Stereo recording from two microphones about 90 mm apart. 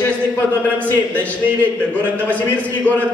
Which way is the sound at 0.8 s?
15° left (ahead or behind).